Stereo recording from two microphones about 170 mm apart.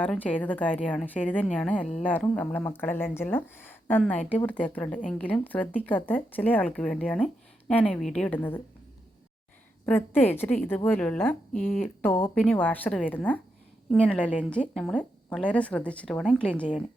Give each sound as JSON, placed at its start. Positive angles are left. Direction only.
{"t": 0.0, "sound": "a woman's voice", "side_deg": 10}
{"t": 9.8, "sound": "a woman's voice", "side_deg": 10}
{"t": 11.5, "sound": "speech", "side_deg": 50}
{"t": 12.3, "sound": "a woman's voice", "side_deg": 5}